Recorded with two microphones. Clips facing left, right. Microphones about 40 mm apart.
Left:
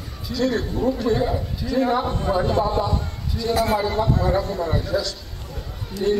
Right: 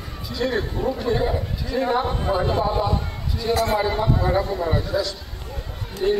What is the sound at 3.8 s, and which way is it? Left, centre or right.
A man's voice, centre.